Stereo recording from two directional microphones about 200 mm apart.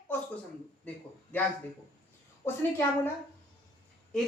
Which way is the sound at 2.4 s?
10° left (ahead or behind).